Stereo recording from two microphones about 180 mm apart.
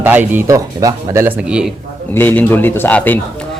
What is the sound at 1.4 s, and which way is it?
Speech, 5° right (ahead or behind).